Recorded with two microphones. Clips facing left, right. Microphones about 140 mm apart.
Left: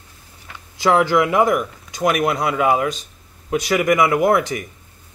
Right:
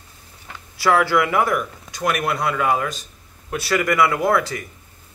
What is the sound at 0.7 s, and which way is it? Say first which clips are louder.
A man's voice: left 2 dB; 20° left (ahead or behind).